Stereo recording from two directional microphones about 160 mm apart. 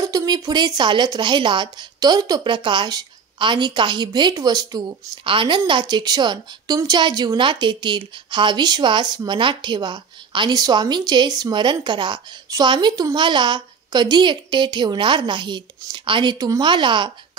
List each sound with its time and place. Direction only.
0.0 s speech: 25° right (ahead or behind)